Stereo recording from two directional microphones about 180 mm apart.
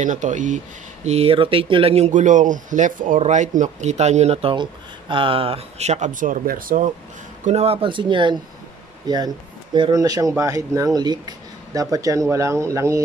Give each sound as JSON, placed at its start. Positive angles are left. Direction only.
{"t": 0.0, "sound": "speech", "side_deg": -45}
{"t": 7.4, "sound": "speech", "side_deg": -35}